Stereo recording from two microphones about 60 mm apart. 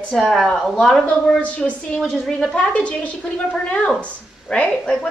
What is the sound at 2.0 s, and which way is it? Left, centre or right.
Speech, centre.